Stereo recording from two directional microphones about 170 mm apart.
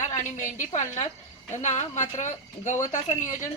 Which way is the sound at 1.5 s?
45° left (ahead or behind).